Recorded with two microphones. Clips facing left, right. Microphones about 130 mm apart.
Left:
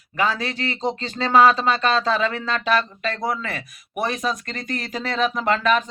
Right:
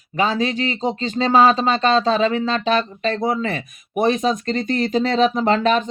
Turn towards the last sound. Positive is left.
turn(degrees=-30)  # may be behind; listen again after turning